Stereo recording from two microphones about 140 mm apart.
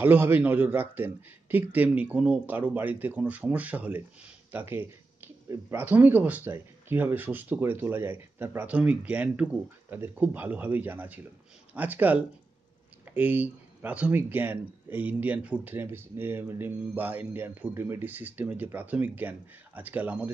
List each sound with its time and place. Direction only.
0.0 s speech: 15° right (ahead or behind)